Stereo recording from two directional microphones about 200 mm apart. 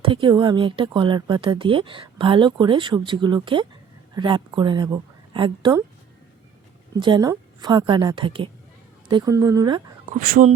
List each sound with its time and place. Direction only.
0.0 s a woman's voice: 25° right (ahead or behind)
7.0 s speech: 20° right (ahead or behind)
10.1 s speech: 45° right (ahead or behind)